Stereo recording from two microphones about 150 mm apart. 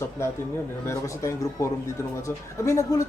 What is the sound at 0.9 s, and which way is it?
Speech, 20° left (ahead or behind).